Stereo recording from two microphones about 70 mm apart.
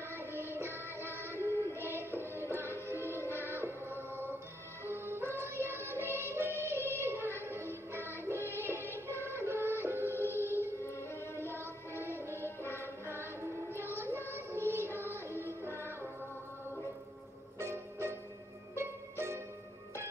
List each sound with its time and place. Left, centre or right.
0.1 s music: right
3.4 s music: right
9.2 s synthetic singing: right
9.8 s music: right
10.6 s music: left
11.4 s music: right
12.8 s child singing: right
17.6 s music: right